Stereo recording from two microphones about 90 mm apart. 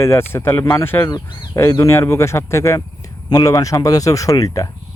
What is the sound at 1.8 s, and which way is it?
Speech, 30° left (ahead or behind).